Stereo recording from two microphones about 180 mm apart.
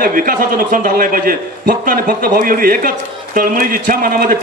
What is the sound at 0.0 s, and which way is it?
A man's voice, 50° right (ahead or behind).